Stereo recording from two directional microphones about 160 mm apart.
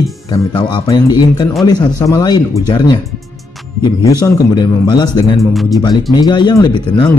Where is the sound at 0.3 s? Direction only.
25° left (ahead or behind).